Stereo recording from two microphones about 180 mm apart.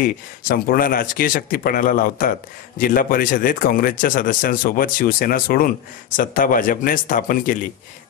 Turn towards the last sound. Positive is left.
turn(degrees=50)  # may be behind; listen again after turning